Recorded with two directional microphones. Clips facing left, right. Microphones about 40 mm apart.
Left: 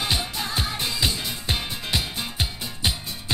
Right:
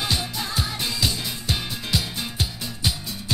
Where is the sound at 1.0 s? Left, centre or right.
Left.